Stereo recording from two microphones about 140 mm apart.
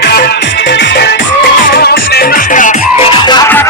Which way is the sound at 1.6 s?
90° left.